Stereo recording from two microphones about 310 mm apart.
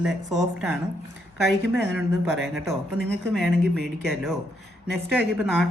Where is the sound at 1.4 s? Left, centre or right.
Left.